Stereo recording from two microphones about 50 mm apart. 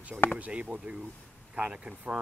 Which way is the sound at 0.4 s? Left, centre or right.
Right.